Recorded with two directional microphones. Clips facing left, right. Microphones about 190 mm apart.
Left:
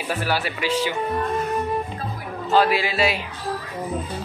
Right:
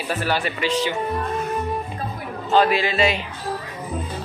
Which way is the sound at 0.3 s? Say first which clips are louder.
Right 1 dB; 10° left (ahead or behind).